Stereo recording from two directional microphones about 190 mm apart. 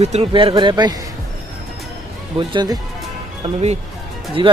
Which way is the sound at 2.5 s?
20° right (ahead or behind).